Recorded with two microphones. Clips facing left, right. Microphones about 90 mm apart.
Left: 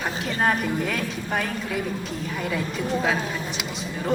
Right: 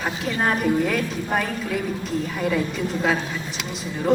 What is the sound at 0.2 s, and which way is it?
A woman's voice, centre (ahead or behind).